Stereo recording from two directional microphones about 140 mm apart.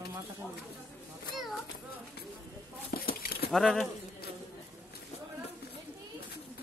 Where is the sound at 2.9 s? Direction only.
90° left.